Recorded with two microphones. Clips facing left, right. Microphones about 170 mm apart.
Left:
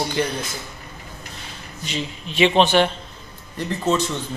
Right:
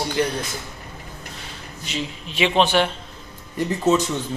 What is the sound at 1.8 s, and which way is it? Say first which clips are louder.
A man's voice: left 1 dB; centre (ahead or behind).